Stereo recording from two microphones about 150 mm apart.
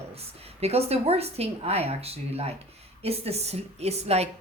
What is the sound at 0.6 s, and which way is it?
A woman's voice, 45° right (ahead or behind).